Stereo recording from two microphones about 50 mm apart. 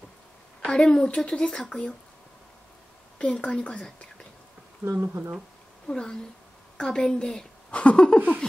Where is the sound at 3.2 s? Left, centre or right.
Left.